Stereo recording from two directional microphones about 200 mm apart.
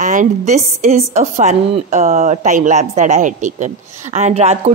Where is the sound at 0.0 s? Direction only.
40° right (ahead or behind).